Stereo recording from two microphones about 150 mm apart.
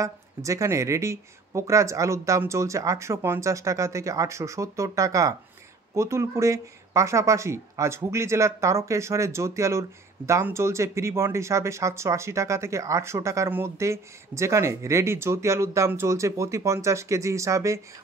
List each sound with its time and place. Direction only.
0.0 s speech: 20° right (ahead or behind)